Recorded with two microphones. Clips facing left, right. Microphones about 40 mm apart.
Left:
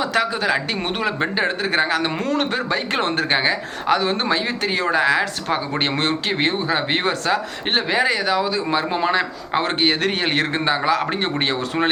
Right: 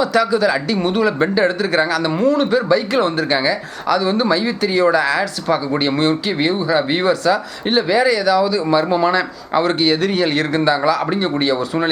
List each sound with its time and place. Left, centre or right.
0.0 s speech: left
2.1 s speech: left
5.8 s speech: left
11.0 s speech: left